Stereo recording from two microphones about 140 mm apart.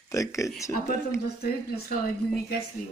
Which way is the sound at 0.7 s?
20° left (ahead or behind).